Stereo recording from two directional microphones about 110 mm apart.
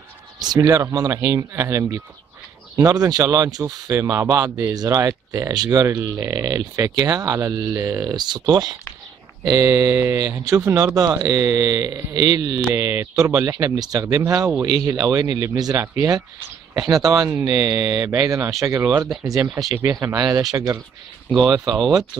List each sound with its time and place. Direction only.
0.6 s speech: 35° right (ahead or behind)
9.4 s speech: 25° right (ahead or behind)
12.7 s speech: 25° right (ahead or behind)
21.6 s speech: centre (ahead or behind)